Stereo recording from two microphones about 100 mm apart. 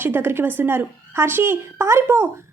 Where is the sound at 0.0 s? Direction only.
25° right (ahead or behind).